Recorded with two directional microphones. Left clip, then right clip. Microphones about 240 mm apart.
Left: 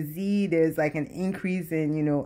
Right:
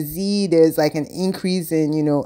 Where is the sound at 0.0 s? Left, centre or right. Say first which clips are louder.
Right 7 dB; right.